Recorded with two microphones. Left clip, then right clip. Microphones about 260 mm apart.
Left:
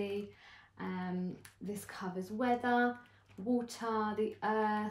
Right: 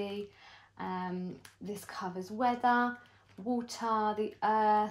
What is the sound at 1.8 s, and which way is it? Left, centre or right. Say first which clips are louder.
Speech: right 4 dB; right.